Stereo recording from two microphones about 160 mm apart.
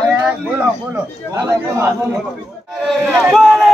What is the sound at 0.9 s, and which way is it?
Speech, 20° right (ahead or behind).